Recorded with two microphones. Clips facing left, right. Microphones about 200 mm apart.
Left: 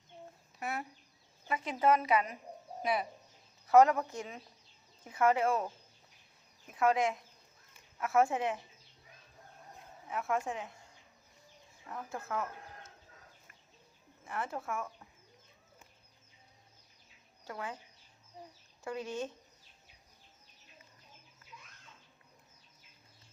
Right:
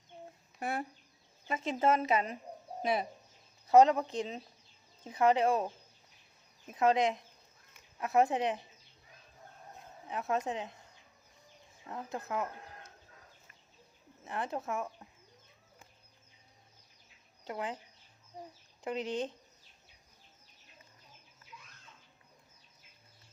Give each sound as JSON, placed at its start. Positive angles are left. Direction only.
{"t": 0.6, "sound": "speech", "side_deg": -30}
{"t": 10.1, "sound": "speech", "side_deg": -20}
{"t": 11.9, "sound": "speech", "side_deg": -20}
{"t": 14.3, "sound": "speech", "side_deg": -20}
{"t": 17.4, "sound": "speech", "side_deg": -20}
{"t": 18.9, "sound": "speech", "side_deg": -20}